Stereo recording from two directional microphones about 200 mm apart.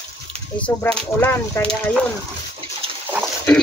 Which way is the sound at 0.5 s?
5° left (ahead or behind).